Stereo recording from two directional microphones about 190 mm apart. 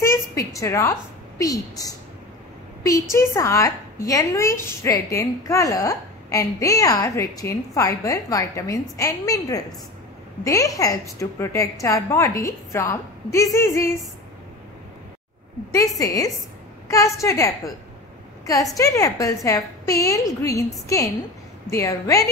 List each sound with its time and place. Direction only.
0.0 s a sound: 15° left (ahead or behind)
1.4 s a woman's voice: 20° left (ahead or behind)
3.1 s a woman's voice: 15° left (ahead or behind)
15.7 s a woman's voice: 20° left (ahead or behind)
18.8 s a woman's voice: 15° left (ahead or behind)